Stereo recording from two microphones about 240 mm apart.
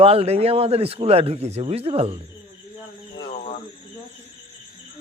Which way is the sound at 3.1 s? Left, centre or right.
Left.